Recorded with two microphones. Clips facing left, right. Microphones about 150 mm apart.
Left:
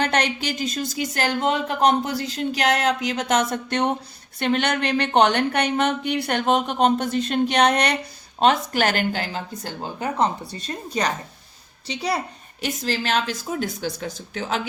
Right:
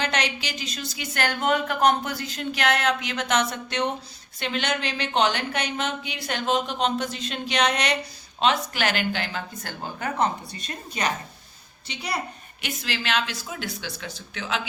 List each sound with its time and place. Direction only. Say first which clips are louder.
0.0 s speech: left 5 dB; 50° left (ahead or behind); by 11.1 s 35° left (ahead or behind)
12.6 s a woman's voice: left 5 dB; 40° left (ahead or behind)